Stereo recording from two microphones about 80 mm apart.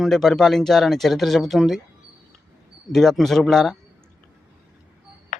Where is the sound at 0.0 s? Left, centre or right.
Centre.